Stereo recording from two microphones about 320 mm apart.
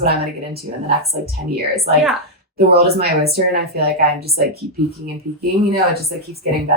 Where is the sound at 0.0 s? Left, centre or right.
Right.